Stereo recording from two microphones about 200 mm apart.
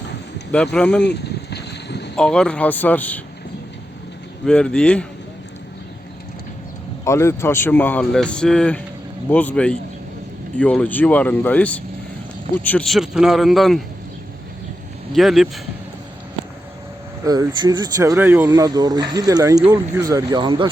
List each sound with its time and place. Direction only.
0.5 s speech: 5° left (ahead or behind)
1.0 s boat: 55° left (ahead or behind)
2.1 s speech: 5° left (ahead or behind)
4.4 s speech: 5° left (ahead or behind)
7.0 s speech: 15° left (ahead or behind)
15.1 s speech: centre (ahead or behind)
17.2 s speech: 20° right (ahead or behind)